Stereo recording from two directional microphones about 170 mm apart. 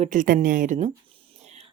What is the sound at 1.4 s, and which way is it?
Whispering, 40° right (ahead or behind).